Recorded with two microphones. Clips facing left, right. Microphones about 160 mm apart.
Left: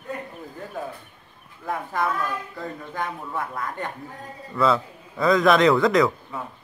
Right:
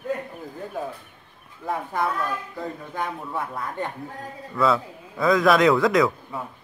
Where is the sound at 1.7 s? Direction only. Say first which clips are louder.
Even; 20° right (ahead or behind).